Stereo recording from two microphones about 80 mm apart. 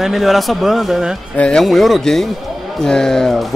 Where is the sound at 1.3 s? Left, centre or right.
Centre.